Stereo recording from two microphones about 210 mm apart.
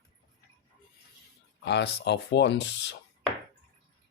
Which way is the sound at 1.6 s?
55° left (ahead or behind).